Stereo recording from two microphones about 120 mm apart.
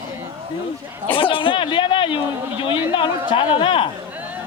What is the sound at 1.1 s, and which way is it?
Speech, 45° left (ahead or behind).